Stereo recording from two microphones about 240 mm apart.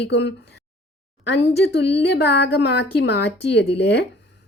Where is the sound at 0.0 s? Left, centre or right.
Left.